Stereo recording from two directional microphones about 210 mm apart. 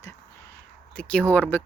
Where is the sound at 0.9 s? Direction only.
5° left (ahead or behind).